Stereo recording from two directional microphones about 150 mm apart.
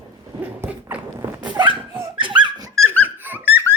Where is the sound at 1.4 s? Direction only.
30° right (ahead or behind).